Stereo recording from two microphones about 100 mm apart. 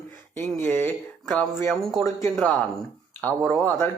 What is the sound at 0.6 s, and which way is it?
Speech, 20° left (ahead or behind).